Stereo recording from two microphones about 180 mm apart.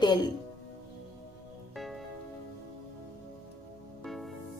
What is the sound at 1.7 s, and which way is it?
Music, centre (ahead or behind).